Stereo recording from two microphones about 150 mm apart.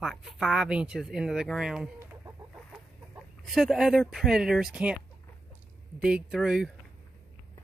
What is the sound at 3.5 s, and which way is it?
Speech, 5° right (ahead or behind).